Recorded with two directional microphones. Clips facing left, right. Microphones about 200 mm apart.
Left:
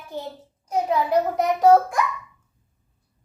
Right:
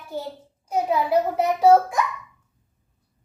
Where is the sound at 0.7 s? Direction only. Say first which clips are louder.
Even; 10° right (ahead or behind).